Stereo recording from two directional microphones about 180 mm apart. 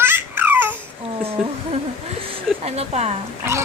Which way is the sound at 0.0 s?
10° right (ahead or behind).